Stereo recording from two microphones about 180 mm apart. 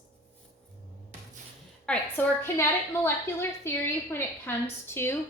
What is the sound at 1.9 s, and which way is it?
A woman's voice, 10° left (ahead or behind).